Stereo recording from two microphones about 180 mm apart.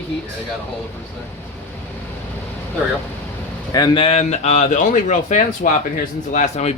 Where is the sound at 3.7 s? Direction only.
25° left (ahead or behind).